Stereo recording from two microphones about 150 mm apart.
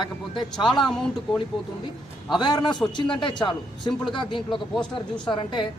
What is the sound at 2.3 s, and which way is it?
A man's voice, 30° left (ahead or behind).